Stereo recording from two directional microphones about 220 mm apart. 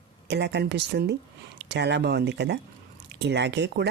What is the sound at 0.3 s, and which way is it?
Speech, 50° right (ahead or behind).